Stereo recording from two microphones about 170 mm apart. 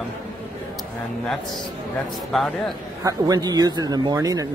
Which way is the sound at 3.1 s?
20° right (ahead or behind).